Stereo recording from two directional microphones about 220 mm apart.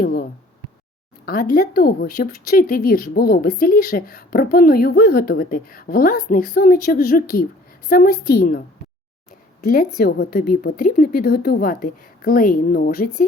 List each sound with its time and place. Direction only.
0.0 s a woman's voice: 40° left (ahead or behind)
9.6 s speech: 40° left (ahead or behind)